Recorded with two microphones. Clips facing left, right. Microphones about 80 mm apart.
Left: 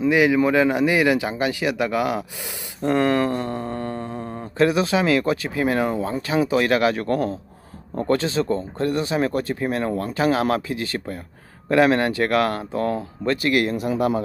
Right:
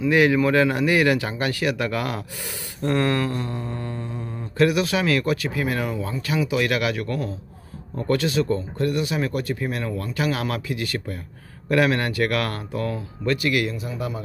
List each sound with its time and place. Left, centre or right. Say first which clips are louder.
0.1 s a man's voice: even; centre; by 4.5 s left
4.6 s speech: left 1 dB; left
13.7 s speech: left 9 dB; left